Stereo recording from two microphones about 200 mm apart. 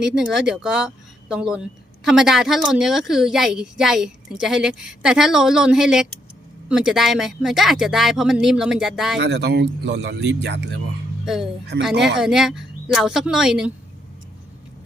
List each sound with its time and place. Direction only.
0.0 s a woman's voice: 5° right (ahead or behind)
9.1 s speech: 60° right (ahead or behind)
12.1 s a woman's voice: centre (ahead or behind)